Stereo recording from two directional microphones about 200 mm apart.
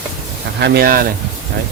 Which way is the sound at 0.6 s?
55° right (ahead or behind).